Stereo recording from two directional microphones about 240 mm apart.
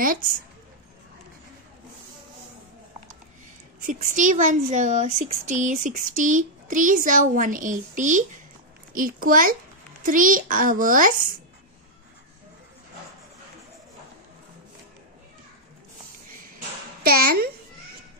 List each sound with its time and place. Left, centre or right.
3.8 s speech: right
17.0 s a child's voice: right